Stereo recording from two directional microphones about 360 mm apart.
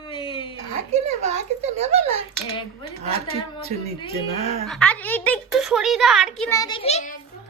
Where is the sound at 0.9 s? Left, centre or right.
Centre.